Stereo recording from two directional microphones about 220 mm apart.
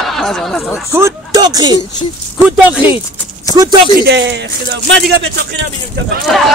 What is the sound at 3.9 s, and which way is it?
Speech, 50° right (ahead or behind).